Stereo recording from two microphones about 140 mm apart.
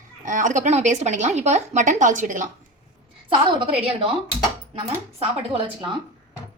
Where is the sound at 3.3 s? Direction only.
40° right (ahead or behind).